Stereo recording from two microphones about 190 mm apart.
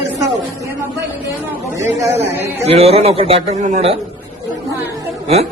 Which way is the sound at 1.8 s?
10° right (ahead or behind).